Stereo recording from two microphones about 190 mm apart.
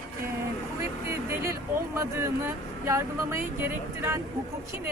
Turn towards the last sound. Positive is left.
turn(degrees=-15)  # may be behind; listen again after turning